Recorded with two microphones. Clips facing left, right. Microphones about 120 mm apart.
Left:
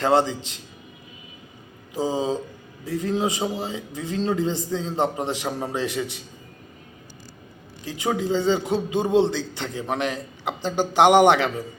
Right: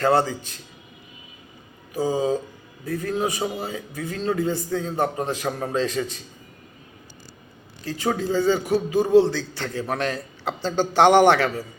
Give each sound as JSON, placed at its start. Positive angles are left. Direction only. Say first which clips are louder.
{"t": 0.0, "sound": "a man's voice", "louder": "even", "side_deg": 20}
{"t": 1.9, "sound": "a man's voice", "louder": "right 2 dB", "side_deg": 20}
{"t": 7.9, "sound": "a man's voice", "louder": "even", "side_deg": 15}